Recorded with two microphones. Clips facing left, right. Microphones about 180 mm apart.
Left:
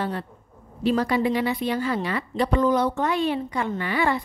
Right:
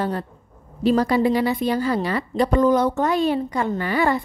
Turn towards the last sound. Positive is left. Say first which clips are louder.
# right 3 dB
turn(degrees=-40)  # may be behind; listen again after turning